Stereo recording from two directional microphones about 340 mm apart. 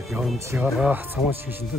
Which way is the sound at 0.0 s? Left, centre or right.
Centre.